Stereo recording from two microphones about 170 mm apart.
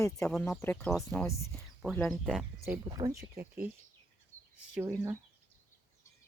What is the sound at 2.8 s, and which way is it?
Speech, 25° right (ahead or behind).